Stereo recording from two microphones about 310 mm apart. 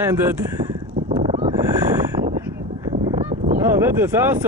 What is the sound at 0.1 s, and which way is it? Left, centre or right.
Speech, centre.